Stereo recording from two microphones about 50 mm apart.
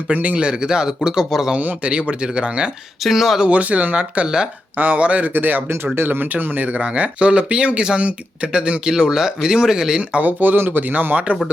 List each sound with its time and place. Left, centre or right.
0.1 s speech: right
0.3 s speech: centre
1.5 s speech: right
3.0 s speech: centre
3.4 s speech: right
5.3 s speech: right; by 10.0 s centre
10.0 s speech: right